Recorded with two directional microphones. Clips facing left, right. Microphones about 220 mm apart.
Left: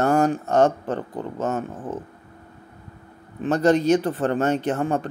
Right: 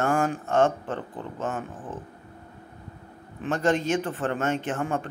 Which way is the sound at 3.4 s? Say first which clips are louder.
Left 6 dB; 40° left (ahead or behind).